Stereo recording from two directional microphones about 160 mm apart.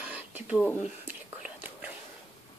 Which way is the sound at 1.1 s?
10° right (ahead or behind).